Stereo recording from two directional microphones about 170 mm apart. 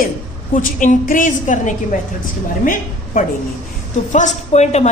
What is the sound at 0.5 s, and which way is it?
A woman's voice, 50° left (ahead or behind).